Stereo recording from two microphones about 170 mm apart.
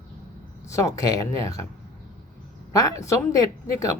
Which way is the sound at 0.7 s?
20° left (ahead or behind).